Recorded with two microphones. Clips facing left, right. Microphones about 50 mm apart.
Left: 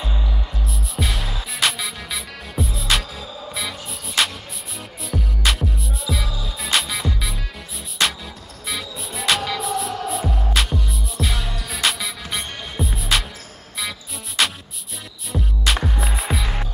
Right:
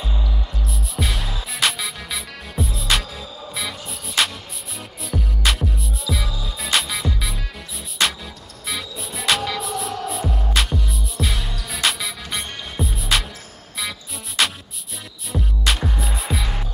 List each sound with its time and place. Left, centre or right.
0.2 s music: centre
0.7 s music: centre